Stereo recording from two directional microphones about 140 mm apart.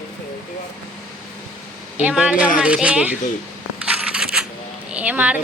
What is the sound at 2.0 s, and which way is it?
A woman's voice, 10° right (ahead or behind).